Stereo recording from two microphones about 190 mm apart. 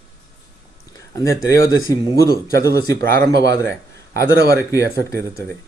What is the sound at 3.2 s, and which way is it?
Speech, 60° right (ahead or behind).